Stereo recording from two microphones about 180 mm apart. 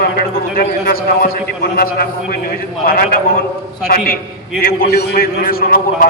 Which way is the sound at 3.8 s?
55° left (ahead or behind).